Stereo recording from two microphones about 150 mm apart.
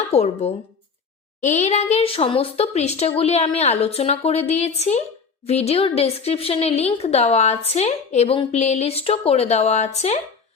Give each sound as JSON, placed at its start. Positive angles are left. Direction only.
{"t": 0.1, "sound": "speech", "side_deg": 45}